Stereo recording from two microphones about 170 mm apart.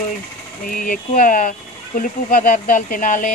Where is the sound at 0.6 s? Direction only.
55° left (ahead or behind).